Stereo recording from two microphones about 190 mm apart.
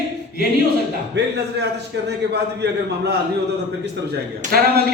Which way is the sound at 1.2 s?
65° right (ahead or behind).